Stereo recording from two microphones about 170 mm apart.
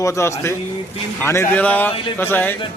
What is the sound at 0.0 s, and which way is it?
A man's voice, 15° left (ahead or behind).